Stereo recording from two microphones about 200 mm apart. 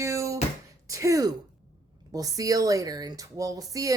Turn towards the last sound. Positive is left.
turn(degrees=-15)  # may be behind; listen again after turning